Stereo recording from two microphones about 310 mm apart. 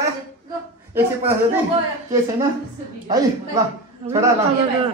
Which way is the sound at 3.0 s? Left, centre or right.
Centre.